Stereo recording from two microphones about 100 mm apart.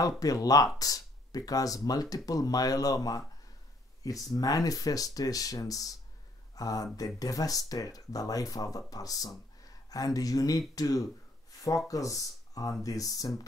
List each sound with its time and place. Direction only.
0.2 s speech: 40° left (ahead or behind)